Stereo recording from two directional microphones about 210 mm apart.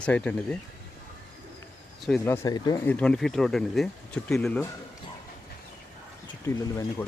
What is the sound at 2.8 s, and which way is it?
Speech, 5° left (ahead or behind).